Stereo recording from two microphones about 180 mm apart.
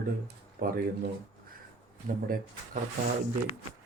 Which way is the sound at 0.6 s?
55° right (ahead or behind).